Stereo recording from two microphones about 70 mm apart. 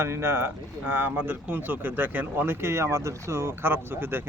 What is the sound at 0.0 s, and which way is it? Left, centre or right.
A man's voice, right.